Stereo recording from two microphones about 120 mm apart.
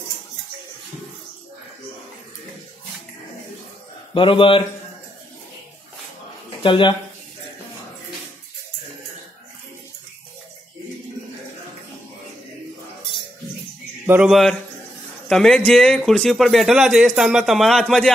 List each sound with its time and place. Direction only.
4.1 s a man's voice: 45° left (ahead or behind)
6.6 s a man's voice: 40° left (ahead or behind)
14.0 s speech: 15° right (ahead or behind)
14.3 s speech: centre (ahead or behind)